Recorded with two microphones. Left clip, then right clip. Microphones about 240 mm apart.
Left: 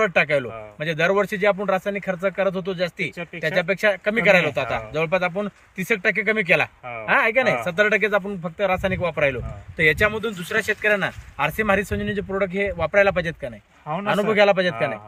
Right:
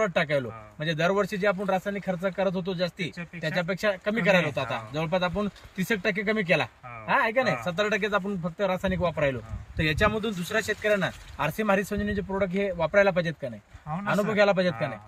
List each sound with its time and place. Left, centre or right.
0.0 s a man's voice: left